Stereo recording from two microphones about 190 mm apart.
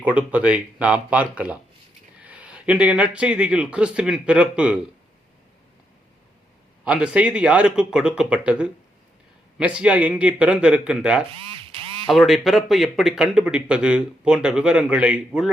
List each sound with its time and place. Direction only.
0.0 s speech: 5° right (ahead or behind)
6.8 s speech: 5° right (ahead or behind)
11.3 s quack: 25° right (ahead or behind)
12.0 s speech: centre (ahead or behind)